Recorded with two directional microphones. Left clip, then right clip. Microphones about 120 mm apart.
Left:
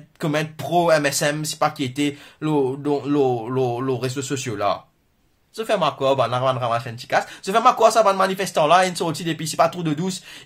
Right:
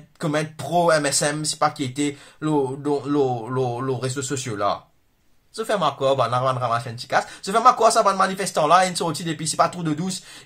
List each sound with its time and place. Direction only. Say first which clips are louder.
0.2 s speech: left 1 dB; 20° left (ahead or behind)